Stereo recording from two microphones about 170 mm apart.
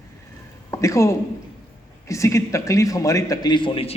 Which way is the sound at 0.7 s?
15° left (ahead or behind).